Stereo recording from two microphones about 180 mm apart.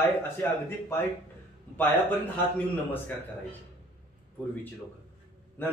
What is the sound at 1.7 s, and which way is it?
Speech, 10° left (ahead or behind).